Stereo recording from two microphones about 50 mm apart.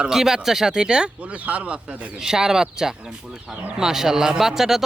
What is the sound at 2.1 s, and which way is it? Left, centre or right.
Speech, centre.